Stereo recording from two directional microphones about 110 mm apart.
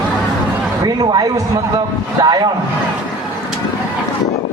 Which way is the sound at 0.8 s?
40° right (ahead or behind).